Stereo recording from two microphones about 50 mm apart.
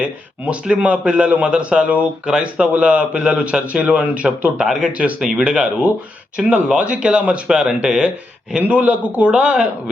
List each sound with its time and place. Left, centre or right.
0.4 s a man's voice: right